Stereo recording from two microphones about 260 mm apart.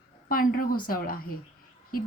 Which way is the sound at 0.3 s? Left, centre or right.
Left.